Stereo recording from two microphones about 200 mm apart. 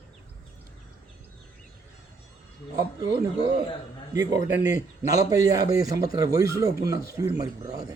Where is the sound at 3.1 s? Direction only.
15° right (ahead or behind).